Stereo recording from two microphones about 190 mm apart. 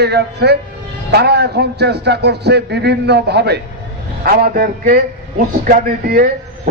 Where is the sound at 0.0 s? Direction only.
60° right (ahead or behind).